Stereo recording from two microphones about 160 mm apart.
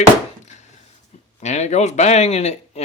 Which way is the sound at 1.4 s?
45° left (ahead or behind).